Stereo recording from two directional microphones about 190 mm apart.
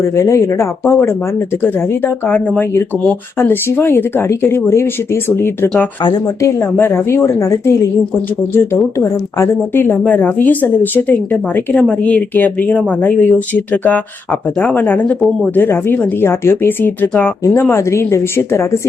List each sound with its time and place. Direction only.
0.2 s speech: 15° left (ahead or behind)
6.0 s a woman's voice: 25° left (ahead or behind)
6.6 s speech: 10° left (ahead or behind)
9.4 s speech: 10° left (ahead or behind)